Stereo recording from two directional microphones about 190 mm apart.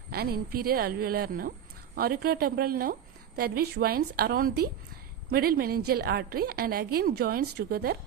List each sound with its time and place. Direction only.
0.1 s a woman's voice: 55° right (ahead or behind)